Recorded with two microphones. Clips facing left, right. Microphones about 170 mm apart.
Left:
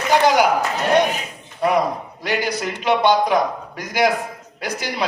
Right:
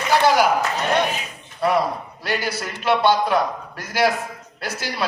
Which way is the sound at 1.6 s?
15° left (ahead or behind).